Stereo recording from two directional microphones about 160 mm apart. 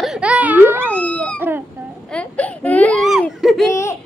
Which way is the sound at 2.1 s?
10° left (ahead or behind).